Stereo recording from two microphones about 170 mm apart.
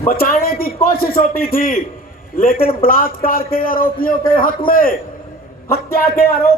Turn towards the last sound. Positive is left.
turn(degrees=65)  # may be behind; listen again after turning